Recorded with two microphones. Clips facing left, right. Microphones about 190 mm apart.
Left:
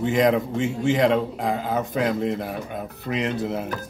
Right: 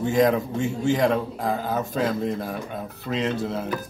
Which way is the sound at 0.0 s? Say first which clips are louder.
Even; 20° left (ahead or behind).